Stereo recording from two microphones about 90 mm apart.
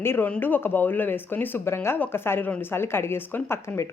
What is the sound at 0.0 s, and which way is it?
A woman's voice, 25° left (ahead or behind).